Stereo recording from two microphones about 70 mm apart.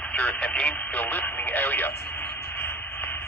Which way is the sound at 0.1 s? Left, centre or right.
Centre.